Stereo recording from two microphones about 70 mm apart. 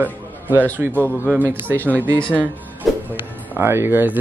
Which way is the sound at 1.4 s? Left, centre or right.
Right.